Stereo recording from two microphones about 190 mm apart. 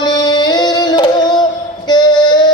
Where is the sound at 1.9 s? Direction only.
20° left (ahead or behind).